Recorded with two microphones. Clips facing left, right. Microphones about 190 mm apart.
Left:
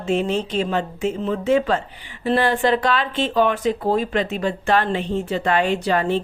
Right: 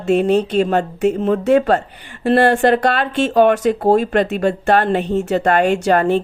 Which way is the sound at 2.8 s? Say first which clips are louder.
Right 4 dB; 65° right (ahead or behind).